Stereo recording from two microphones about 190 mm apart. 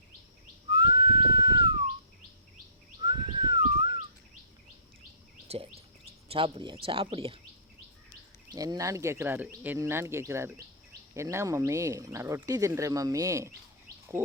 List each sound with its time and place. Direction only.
0.7 s whistling: 25° right (ahead or behind)
3.0 s bird: 25° right (ahead or behind)
6.2 s speech: 30° right (ahead or behind)
8.5 s speech: 20° right (ahead or behind)